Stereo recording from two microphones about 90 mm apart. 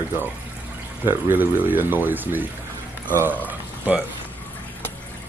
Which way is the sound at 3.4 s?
15° right (ahead or behind).